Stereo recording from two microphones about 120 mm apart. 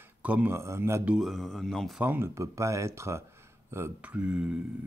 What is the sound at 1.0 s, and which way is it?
Speech, 5° right (ahead or behind).